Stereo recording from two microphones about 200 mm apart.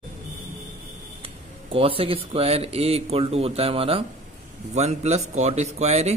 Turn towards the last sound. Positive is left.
turn(degrees=-35)  # may be behind; listen again after turning